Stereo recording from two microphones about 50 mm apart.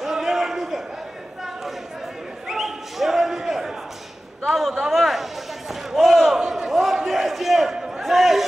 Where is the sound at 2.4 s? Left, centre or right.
Centre.